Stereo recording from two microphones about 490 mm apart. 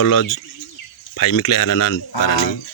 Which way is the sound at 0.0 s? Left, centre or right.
Left.